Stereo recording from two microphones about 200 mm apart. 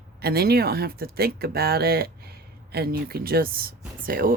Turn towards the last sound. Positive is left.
turn(degrees=-45)  # may be behind; listen again after turning